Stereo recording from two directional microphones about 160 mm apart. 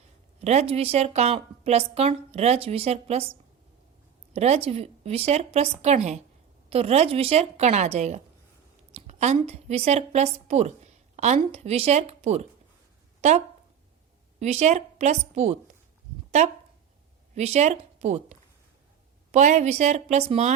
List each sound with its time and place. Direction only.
0.4 s a woman's voice: 40° right (ahead or behind)
4.4 s a woman's voice: 40° right (ahead or behind)